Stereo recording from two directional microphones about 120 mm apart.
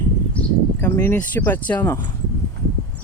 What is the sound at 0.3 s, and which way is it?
Speech, 20° left (ahead or behind).